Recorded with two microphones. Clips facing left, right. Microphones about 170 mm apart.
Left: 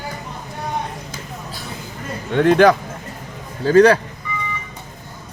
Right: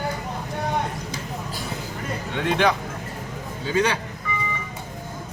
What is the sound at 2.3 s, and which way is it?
Speech, 45° left (ahead or behind).